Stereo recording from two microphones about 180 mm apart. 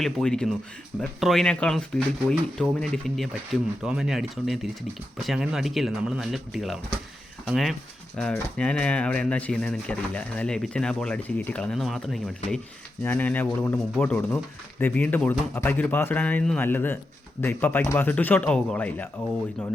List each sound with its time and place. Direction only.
0.0 s speech: 5° left (ahead or behind)